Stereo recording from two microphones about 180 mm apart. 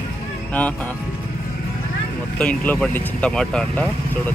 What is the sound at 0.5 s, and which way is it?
Speech, 10° left (ahead or behind).